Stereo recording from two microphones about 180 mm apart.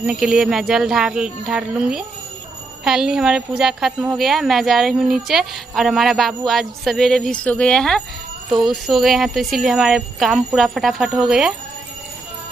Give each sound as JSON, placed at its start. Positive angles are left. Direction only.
{"t": 0.0, "sound": "speech", "side_deg": -5}